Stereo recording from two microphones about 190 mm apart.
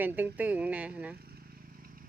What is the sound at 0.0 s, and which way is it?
Speech, 10° right (ahead or behind).